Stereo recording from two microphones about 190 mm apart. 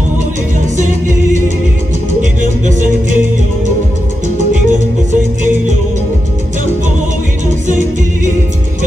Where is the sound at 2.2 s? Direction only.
40° right (ahead or behind).